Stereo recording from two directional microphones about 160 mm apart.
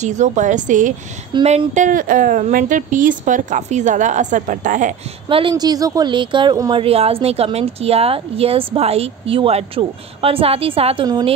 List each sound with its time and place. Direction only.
0.0 s a woman's voice: 50° right (ahead or behind)
5.3 s a woman's voice: 30° right (ahead or behind)
6.8 s speech: 35° right (ahead or behind)